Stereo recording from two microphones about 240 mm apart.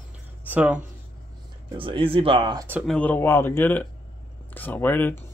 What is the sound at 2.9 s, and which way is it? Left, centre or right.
Speech, centre.